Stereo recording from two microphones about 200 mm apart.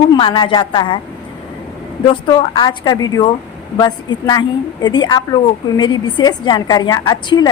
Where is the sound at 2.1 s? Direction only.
20° left (ahead or behind).